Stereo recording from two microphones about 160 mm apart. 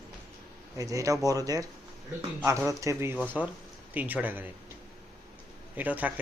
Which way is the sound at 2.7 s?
20° right (ahead or behind).